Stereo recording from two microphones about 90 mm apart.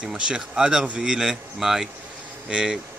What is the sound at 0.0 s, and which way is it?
Speech, 10° right (ahead or behind).